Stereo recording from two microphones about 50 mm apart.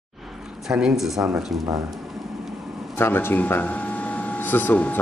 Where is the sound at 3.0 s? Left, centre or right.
Left.